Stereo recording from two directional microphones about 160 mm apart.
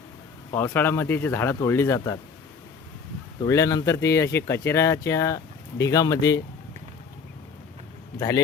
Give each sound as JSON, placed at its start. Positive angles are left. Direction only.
{"t": 0.5, "sound": "speech", "side_deg": 15}
{"t": 3.4, "sound": "speech", "side_deg": 20}